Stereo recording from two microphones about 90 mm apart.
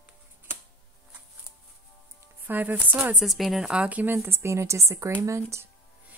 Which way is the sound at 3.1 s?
Centre (ahead or behind).